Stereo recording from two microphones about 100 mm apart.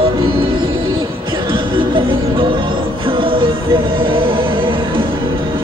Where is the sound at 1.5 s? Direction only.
60° right (ahead or behind).